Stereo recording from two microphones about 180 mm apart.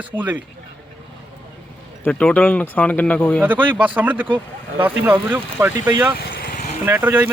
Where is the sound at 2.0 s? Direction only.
10° left (ahead or behind).